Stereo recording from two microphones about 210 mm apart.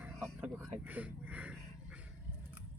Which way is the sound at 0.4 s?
5° right (ahead or behind).